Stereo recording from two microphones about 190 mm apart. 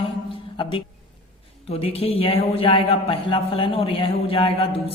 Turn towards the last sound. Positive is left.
turn(degrees=30)  # may be behind; listen again after turning